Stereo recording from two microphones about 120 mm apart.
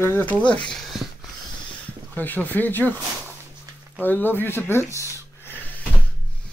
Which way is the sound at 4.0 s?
15° left (ahead or behind).